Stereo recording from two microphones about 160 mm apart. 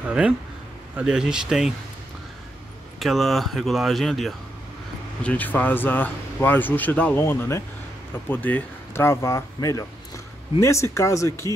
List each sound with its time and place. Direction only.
0.0 s speech: 5° right (ahead or behind)
3.0 s speech: centre (ahead or behind); by 11.5 s 20° left (ahead or behind)